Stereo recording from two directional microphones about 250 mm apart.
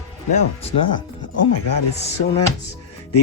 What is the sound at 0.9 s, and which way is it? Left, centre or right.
Speech, left.